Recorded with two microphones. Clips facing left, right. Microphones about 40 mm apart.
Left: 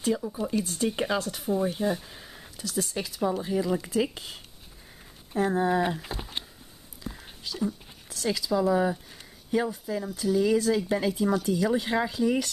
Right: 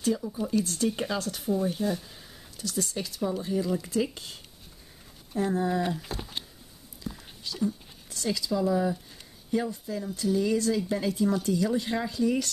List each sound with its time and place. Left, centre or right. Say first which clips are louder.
0.0 s speech: left 1 dB; centre
2.5 s speech: left 1 dB; centre
7.1 s a sound: even; centre
9.7 s speech: left 2 dB; centre